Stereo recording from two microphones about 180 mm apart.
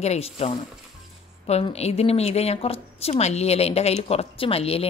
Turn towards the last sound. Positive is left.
turn(degrees=35)  # may be behind; listen again after turning